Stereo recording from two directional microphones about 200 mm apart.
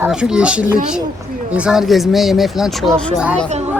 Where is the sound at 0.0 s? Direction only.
5° right (ahead or behind).